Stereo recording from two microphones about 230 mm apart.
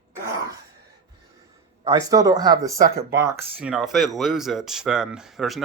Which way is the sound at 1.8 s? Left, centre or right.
Centre.